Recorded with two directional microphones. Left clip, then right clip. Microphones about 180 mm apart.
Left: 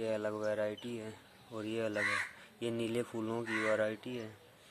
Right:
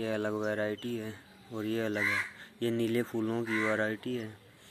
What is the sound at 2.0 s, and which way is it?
Speech, 30° right (ahead or behind).